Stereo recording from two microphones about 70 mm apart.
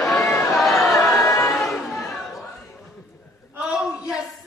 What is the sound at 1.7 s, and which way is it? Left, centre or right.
Chatter, centre.